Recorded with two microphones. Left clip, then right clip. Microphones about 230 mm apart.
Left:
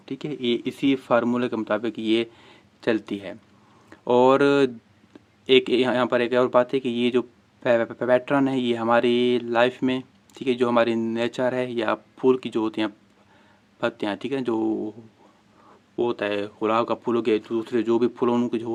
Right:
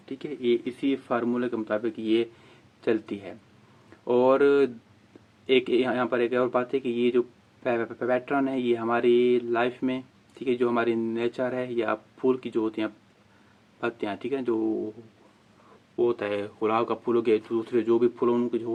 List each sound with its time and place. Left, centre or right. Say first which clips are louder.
0.0 s speech: left 2 dB; left
16.0 s speech: left 1 dB; left